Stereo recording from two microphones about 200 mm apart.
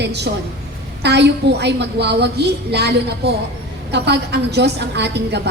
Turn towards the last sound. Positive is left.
turn(degrees=-60)  # may be behind; listen again after turning